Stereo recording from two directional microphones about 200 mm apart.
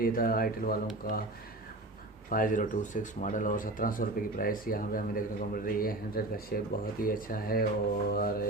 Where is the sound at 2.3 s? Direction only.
40° left (ahead or behind).